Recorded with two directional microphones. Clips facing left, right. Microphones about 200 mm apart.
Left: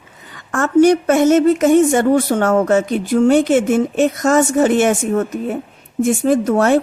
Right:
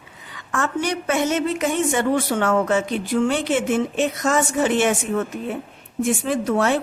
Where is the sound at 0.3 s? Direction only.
45° left (ahead or behind).